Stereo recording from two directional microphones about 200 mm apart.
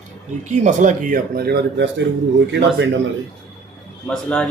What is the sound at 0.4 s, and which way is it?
A man's voice, 35° right (ahead or behind).